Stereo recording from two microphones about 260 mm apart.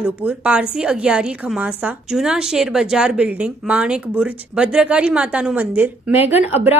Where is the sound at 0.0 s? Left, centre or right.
Centre.